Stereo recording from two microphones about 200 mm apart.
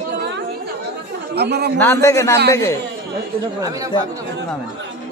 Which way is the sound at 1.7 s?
10° left (ahead or behind).